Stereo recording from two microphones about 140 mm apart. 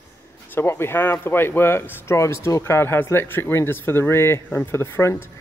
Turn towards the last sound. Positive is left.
turn(degrees=15)  # may be behind; listen again after turning